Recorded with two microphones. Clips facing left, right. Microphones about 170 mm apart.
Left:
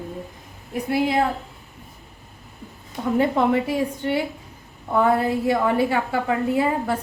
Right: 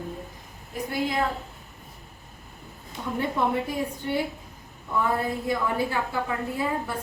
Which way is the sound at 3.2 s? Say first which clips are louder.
Left 6 dB; 85° left.